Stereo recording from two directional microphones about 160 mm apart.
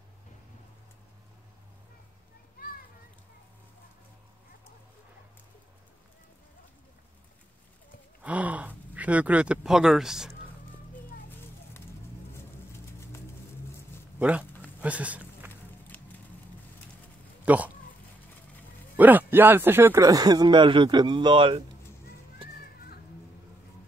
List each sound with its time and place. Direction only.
8.2 s a sound: 10° right (ahead or behind)
14.8 s a sound: 10° right (ahead or behind)
15.9 s music: 10° left (ahead or behind)
17.5 s speech: 10° right (ahead or behind)
18.9 s speech: 10° right (ahead or behind); by 21.6 s 30° right (ahead or behind)
22.4 s children playing: 35° right (ahead or behind)